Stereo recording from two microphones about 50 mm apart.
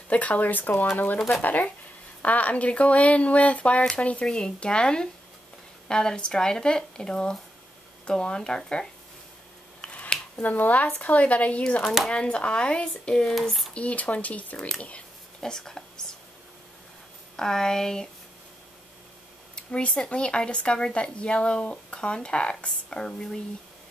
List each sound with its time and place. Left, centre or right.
0.1 s speech: left
10.0 s a sound: centre
10.5 s speech: left; by 13.3 s centre
13.3 s speech: centre
13.7 s speech: left
15.4 s speech: centre
17.4 s speech: centre
19.5 s a sound: left
20.1 s speech: left